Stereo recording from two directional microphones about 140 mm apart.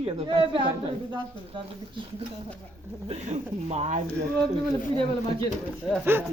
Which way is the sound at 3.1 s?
50° right (ahead or behind).